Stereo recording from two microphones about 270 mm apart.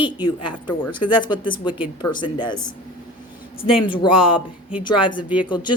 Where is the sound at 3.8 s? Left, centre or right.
Centre.